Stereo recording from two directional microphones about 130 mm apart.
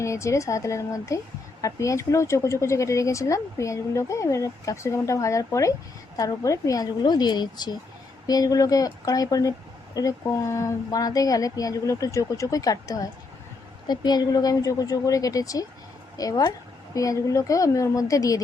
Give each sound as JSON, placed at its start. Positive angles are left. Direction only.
{"t": 0.0, "sound": "a woman's voice", "side_deg": 25}